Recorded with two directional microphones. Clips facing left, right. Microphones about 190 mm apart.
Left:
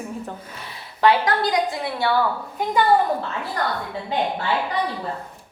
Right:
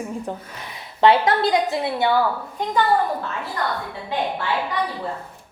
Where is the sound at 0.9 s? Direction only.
25° right (ahead or behind).